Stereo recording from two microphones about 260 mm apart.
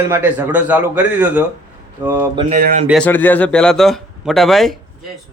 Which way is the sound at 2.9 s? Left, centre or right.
Centre.